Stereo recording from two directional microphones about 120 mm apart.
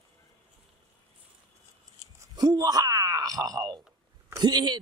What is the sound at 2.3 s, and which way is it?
Speech, 30° right (ahead or behind).